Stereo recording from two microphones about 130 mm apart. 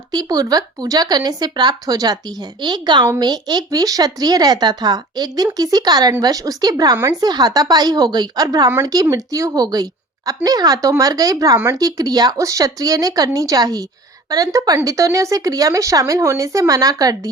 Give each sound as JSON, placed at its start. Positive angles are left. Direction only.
{"t": 0.1, "sound": "speech", "side_deg": -30}